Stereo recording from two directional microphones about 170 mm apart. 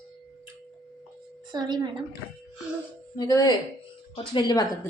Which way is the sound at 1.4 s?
25° right (ahead or behind).